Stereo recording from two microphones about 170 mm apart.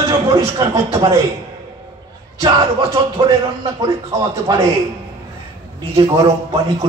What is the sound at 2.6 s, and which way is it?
Speech, 35° right (ahead or behind).